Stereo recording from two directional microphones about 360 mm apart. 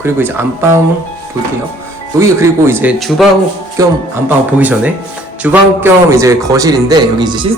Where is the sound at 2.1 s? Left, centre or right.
Centre.